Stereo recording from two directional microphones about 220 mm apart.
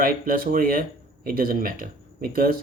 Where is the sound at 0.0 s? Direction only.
40° right (ahead or behind).